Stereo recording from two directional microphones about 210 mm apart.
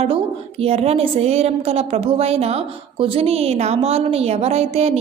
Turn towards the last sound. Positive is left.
turn(degrees=-30)  # may be behind; listen again after turning